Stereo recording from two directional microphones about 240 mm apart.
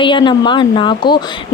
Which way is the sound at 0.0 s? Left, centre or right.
Centre.